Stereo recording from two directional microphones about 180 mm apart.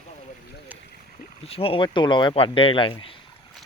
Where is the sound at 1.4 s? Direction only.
30° left (ahead or behind).